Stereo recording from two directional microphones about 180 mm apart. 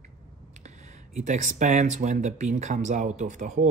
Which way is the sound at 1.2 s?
45° right (ahead or behind).